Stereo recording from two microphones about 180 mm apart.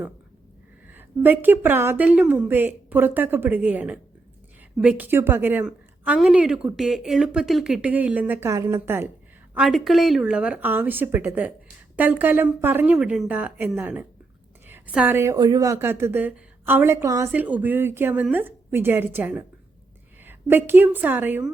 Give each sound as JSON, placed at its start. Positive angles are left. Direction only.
{"t": 0.9, "sound": "a woman's voice", "side_deg": -10}
{"t": 9.6, "sound": "a woman's voice", "side_deg": 0}